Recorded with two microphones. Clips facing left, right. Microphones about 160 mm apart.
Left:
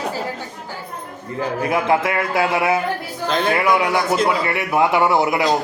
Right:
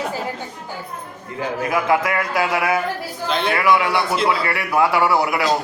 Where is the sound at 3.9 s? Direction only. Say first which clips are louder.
Left 2 dB; 45° left (ahead or behind).